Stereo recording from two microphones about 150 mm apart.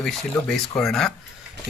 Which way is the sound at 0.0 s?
5° left (ahead or behind).